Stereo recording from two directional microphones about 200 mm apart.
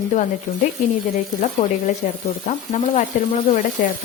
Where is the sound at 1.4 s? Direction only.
35° left (ahead or behind).